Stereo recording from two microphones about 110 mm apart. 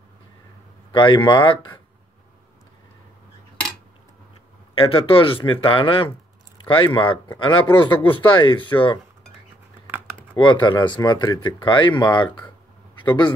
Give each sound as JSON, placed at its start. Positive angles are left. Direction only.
{"t": 0.9, "sound": "speech", "side_deg": 45}
{"t": 4.7, "sound": "speech", "side_deg": 55}
{"t": 10.3, "sound": "speech", "side_deg": 45}